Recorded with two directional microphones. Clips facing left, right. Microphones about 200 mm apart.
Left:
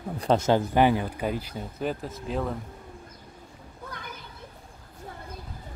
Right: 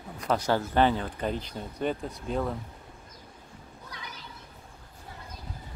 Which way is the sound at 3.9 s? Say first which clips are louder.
Left 2 dB; 55° left (ahead or behind).